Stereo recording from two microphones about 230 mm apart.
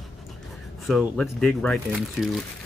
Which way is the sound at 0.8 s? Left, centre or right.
Centre.